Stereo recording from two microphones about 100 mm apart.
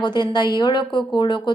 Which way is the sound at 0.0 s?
50° left (ahead or behind).